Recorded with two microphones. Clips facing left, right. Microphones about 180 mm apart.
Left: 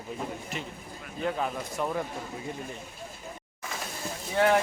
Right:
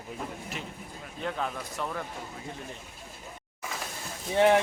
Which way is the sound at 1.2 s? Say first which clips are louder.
Left 3 dB; 5° left (ahead or behind).